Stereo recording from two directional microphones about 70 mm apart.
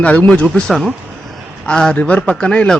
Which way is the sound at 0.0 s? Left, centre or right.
Left.